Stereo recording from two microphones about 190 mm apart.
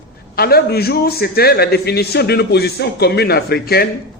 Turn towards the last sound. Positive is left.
turn(degrees=55)  # may be behind; listen again after turning